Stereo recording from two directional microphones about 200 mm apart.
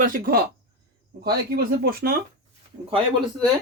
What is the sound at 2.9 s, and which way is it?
Speech, 25° right (ahead or behind).